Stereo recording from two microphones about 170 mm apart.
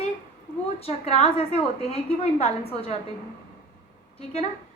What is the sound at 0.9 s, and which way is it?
A woman's voice, 35° left (ahead or behind).